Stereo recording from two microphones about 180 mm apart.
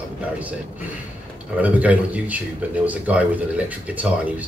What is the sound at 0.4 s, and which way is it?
Speech, 10° right (ahead or behind).